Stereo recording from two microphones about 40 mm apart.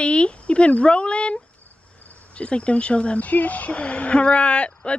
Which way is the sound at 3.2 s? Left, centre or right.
Left.